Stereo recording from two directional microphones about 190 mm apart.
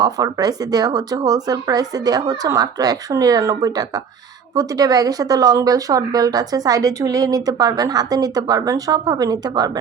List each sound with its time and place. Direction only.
0.0 s speech: 20° right (ahead or behind)